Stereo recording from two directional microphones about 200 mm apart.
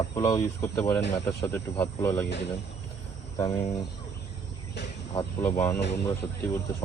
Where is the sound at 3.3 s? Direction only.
20° left (ahead or behind).